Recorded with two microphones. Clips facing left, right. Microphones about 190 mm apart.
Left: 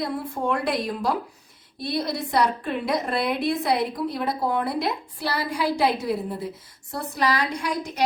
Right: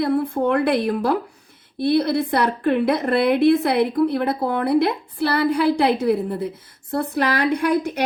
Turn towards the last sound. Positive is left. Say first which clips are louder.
# right 9 dB
turn(degrees=-60)  # may be behind; listen again after turning